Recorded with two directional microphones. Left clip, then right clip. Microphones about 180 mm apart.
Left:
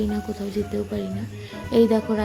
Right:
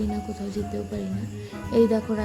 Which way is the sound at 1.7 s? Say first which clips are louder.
Left 2 dB; 10° left (ahead or behind).